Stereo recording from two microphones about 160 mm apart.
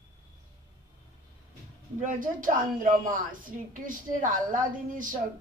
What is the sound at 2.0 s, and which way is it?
A woman's voice, 55° right (ahead or behind).